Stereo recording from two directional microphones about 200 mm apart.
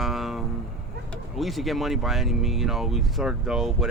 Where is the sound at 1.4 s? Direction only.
Centre (ahead or behind).